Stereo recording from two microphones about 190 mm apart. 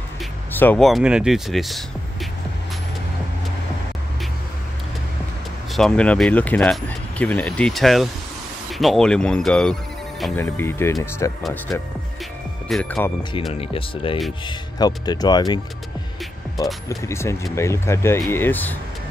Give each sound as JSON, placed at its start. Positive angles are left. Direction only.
{"t": 0.5, "sound": "speech", "side_deg": 10}
{"t": 5.7, "sound": "speech", "side_deg": 5}
{"t": 12.6, "sound": "speech", "side_deg": 5}
{"t": 13.5, "sound": "speech", "side_deg": 30}
{"t": 16.9, "sound": "speech", "side_deg": 15}